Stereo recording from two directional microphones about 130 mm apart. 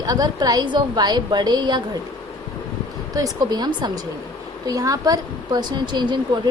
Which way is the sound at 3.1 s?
30° right (ahead or behind).